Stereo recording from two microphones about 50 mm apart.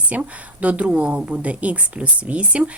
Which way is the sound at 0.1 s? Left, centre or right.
Right.